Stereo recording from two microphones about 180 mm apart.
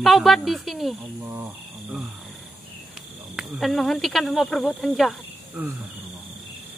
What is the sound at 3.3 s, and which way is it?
Speech, centre (ahead or behind).